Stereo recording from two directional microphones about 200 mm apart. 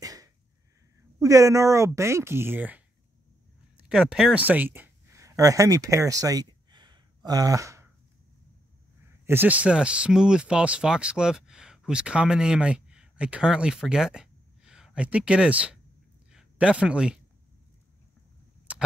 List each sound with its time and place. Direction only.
0.0 s sneeze: 15° right (ahead or behind)
1.2 s speech: 15° right (ahead or behind)
6.7 s gasp: 20° right (ahead or behind)
9.2 s speech: 10° right (ahead or behind)
16.3 s a sound: 5° right (ahead or behind)
18.7 s a sound: 5° right (ahead or behind)